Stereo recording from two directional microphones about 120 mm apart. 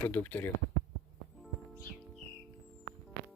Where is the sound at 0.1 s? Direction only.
15° left (ahead or behind).